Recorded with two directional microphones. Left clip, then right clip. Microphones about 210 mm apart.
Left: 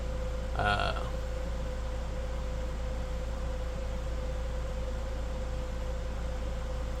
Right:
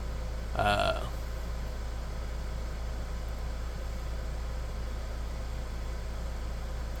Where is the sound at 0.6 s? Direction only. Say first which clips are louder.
Right 3 dB; 30° right (ahead or behind).